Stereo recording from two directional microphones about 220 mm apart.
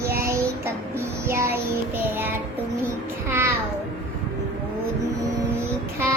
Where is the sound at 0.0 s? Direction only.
45° right (ahead or behind).